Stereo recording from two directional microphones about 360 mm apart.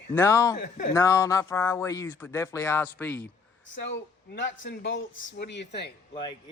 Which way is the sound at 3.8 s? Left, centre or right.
Left.